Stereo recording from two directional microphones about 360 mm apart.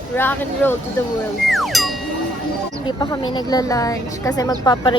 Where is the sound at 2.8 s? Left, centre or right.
Centre.